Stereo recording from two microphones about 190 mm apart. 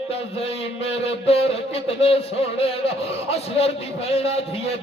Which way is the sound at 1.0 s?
30° left (ahead or behind).